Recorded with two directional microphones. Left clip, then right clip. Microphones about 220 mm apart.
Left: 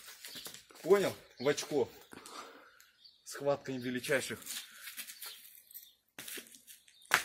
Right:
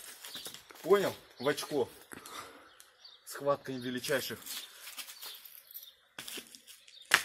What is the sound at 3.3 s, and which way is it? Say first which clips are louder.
Speech: right 2 dB; 15° left (ahead or behind).